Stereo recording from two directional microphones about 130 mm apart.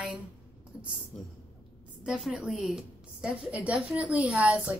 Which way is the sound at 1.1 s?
10° left (ahead or behind).